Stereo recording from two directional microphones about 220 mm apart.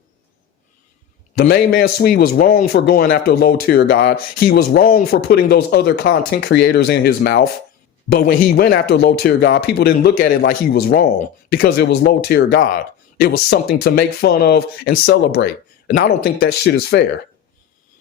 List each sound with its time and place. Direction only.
1.4 s a man's voice: 45° left (ahead or behind)